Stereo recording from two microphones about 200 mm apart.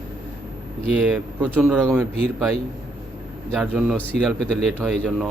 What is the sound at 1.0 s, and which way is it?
Speech, 5° right (ahead or behind).